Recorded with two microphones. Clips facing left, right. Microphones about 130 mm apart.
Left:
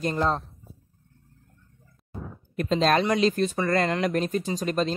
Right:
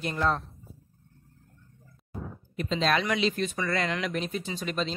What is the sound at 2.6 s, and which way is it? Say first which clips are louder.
Speech: left 5 dB; 45° left (ahead or behind).